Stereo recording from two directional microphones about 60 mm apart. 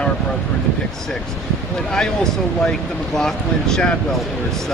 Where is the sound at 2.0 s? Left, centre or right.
Centre.